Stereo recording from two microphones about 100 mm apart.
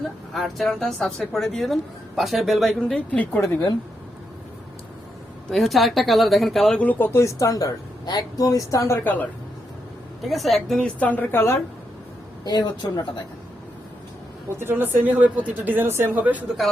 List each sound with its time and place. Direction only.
0.3 s speech: centre (ahead or behind)
2.9 s a woman's voice: 15° left (ahead or behind)
3.4 s speech: 35° left (ahead or behind)
5.5 s speech: centre (ahead or behind)
6.7 s speech: 20° left (ahead or behind)
10.2 s a woman's voice: centre (ahead or behind); by 11.6 s 25° left (ahead or behind)
12.5 s a woman's voice: 45° left (ahead or behind)
14.6 s speech: 20° right (ahead or behind)